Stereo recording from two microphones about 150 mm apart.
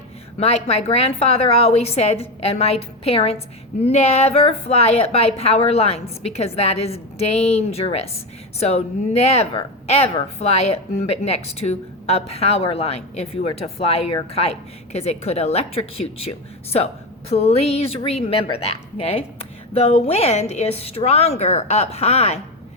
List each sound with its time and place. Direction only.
0.3 s a woman's voice: 45° left (ahead or behind)